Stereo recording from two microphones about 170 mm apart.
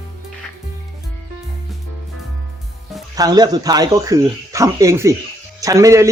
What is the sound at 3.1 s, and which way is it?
Speech, 20° right (ahead or behind).